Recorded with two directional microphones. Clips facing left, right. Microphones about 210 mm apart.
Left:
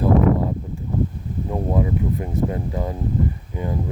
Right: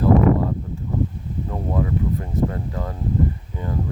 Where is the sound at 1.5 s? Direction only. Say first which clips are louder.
Left 3 dB; 15° left (ahead or behind).